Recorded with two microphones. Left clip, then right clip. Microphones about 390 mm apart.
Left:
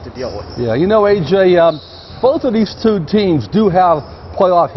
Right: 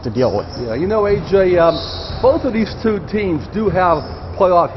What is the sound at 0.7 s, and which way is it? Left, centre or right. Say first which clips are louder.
Speech: left 6 dB; left.